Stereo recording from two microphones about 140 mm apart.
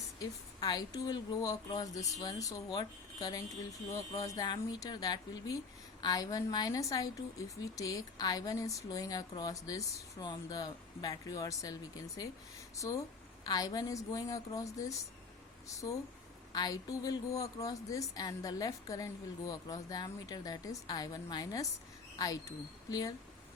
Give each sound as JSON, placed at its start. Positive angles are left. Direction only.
{"t": 0.2, "sound": "a woman's voice", "side_deg": 30}